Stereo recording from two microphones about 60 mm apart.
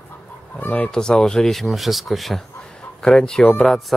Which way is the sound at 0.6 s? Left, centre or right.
Centre.